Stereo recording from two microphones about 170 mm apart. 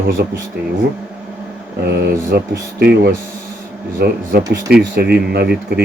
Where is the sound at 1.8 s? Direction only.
75° right (ahead or behind).